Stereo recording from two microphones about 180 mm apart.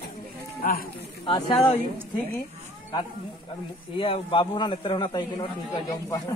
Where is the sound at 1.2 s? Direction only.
25° left (ahead or behind).